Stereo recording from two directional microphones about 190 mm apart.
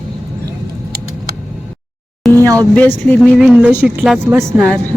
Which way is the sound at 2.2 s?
Centre (ahead or behind).